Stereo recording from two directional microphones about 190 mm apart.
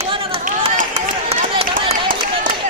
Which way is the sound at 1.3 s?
30° right (ahead or behind).